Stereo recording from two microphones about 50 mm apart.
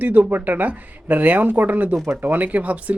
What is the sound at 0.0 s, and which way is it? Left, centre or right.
Speech, right.